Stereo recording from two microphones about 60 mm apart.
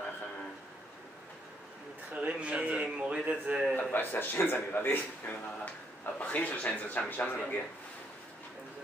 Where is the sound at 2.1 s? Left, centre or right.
Right.